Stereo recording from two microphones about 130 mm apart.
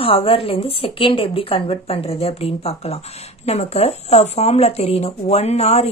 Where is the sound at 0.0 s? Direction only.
45° left (ahead or behind).